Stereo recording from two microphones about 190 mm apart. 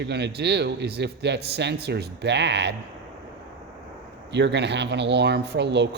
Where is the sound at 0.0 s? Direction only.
60° right (ahead or behind).